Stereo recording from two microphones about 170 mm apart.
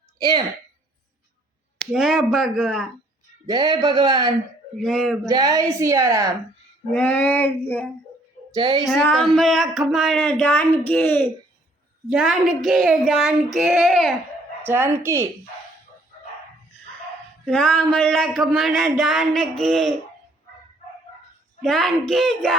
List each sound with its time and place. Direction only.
0.2 s a woman's voice: 25° right (ahead or behind)
1.8 s speech: centre (ahead or behind)
3.4 s a woman's voice: 25° right (ahead or behind)
4.8 s speech: centre (ahead or behind)
5.3 s a woman's voice: 20° right (ahead or behind)
6.9 s female singing: 10° left (ahead or behind)
8.5 s a woman's voice: 30° right (ahead or behind)
9.0 s speech: centre (ahead or behind)
12.0 s speech: centre (ahead or behind)
14.7 s speech: 15° right (ahead or behind)
17.4 s speech: 5° left (ahead or behind)
21.6 s speech: centre (ahead or behind)